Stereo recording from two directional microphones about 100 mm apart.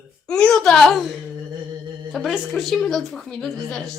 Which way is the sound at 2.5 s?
Centre (ahead or behind).